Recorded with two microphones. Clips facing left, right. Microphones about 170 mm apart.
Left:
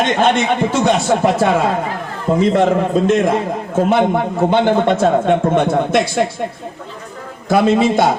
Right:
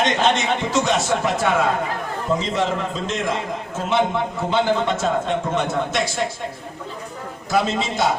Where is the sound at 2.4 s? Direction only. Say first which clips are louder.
Left 9 dB; 55° left (ahead or behind).